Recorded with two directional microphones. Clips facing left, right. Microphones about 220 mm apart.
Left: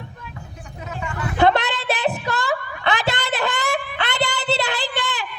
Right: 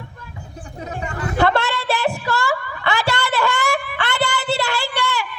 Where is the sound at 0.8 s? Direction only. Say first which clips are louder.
Right 2 dB; 40° right (ahead or behind).